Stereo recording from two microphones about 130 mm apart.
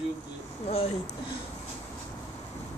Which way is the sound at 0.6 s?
55° left (ahead or behind).